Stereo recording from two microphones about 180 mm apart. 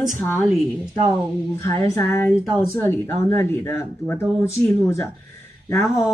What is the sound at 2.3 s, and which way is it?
Speech, centre (ahead or behind).